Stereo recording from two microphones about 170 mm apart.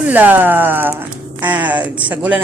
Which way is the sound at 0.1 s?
10° right (ahead or behind).